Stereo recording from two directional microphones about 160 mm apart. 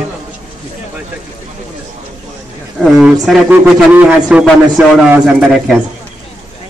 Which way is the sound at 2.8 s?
5° right (ahead or behind).